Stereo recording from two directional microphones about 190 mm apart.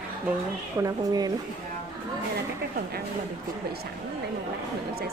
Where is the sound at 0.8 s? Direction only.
20° right (ahead or behind).